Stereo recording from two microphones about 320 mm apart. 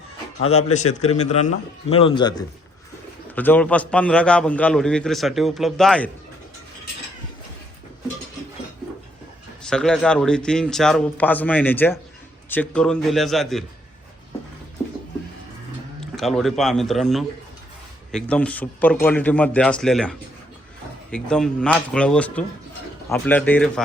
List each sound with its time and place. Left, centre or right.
0.4 s speech: left
3.3 s a man's voice: centre
9.6 s a man's voice: centre
16.0 s a man's voice: centre